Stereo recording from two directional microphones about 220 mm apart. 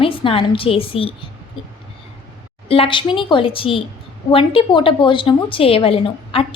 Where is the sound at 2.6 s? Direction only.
25° left (ahead or behind).